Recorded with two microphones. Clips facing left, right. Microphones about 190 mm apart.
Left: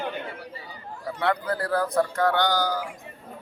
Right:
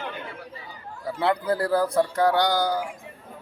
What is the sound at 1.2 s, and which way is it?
A man's voice, 30° right (ahead or behind).